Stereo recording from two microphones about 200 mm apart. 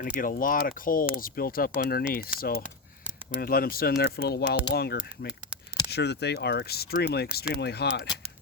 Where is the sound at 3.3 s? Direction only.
45° left (ahead or behind).